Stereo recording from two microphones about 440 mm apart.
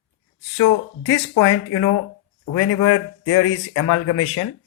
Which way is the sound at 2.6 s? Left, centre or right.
Left.